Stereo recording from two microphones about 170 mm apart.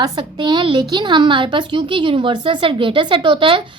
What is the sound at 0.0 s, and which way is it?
A woman's voice, 25° right (ahead or behind).